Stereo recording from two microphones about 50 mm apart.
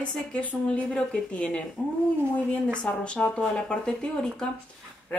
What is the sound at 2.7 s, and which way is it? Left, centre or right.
A woman's voice, left.